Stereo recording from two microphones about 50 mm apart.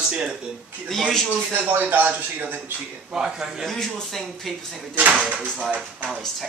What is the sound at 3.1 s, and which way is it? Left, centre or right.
Speech, centre.